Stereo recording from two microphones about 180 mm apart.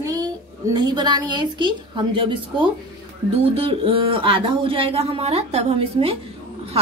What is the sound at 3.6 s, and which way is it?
A woman's voice, 30° right (ahead or behind).